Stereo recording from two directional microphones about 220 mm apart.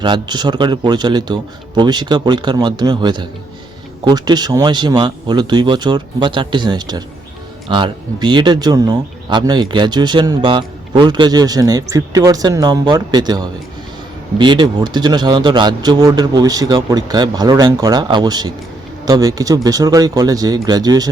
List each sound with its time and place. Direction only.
0.0 s speech: 20° right (ahead or behind)